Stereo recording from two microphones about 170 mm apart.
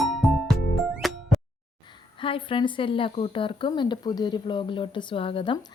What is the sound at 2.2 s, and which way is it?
A woman's voice, 30° left (ahead or behind).